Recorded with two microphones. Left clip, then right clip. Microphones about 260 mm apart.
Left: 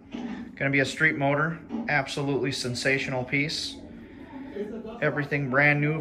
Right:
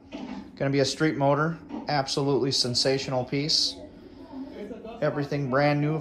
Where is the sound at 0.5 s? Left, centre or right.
Centre.